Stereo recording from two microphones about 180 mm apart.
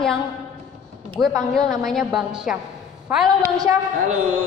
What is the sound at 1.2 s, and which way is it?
A woman's voice, centre (ahead or behind).